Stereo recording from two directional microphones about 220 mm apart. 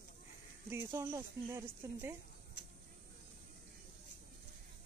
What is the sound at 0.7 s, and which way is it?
Speech, 10° right (ahead or behind).